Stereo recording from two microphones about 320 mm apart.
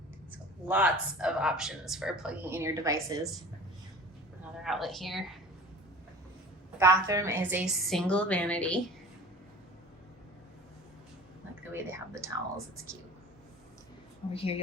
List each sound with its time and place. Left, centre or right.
0.3 s speech: centre
4.6 s speech: centre
6.7 s speech: centre
11.7 s speech: centre
14.3 s a woman's voice: centre